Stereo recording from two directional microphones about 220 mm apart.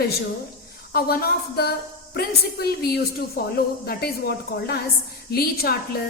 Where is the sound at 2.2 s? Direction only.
45° left (ahead or behind).